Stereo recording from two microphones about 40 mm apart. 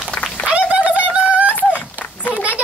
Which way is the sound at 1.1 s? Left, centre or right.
Right.